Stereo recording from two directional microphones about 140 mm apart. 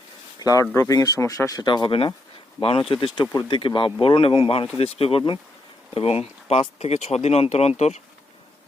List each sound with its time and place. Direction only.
0.3 s speech: 25° left (ahead or behind); by 7.9 s 50° left (ahead or behind)